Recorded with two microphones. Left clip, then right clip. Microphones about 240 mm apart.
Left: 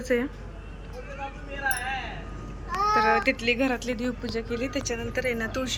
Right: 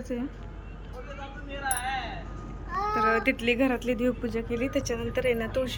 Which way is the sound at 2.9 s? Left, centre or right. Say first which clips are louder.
Left 2 dB; centre.